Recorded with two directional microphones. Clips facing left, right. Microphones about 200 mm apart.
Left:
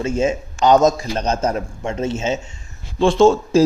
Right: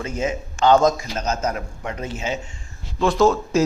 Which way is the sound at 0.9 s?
30° left (ahead or behind).